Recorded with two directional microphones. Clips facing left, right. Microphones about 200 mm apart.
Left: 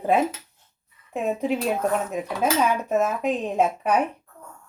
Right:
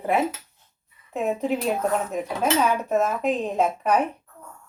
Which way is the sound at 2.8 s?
10° left (ahead or behind).